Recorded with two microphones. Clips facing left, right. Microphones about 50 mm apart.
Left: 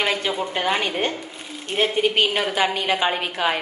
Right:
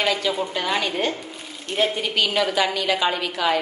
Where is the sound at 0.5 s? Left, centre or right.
Left.